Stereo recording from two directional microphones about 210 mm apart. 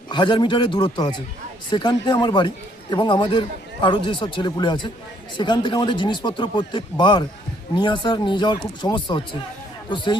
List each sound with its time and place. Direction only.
0.1 s speech: 20° left (ahead or behind)